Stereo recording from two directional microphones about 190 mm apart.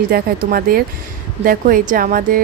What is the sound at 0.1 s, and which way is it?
Speech, 50° right (ahead or behind).